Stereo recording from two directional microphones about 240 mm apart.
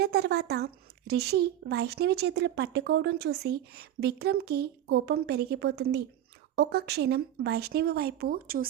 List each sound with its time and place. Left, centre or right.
0.0 s speech: right